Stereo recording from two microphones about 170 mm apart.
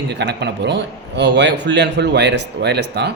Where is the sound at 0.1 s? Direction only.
90° right.